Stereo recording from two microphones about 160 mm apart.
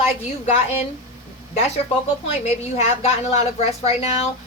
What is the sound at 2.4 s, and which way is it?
A woman's voice, 45° left (ahead or behind).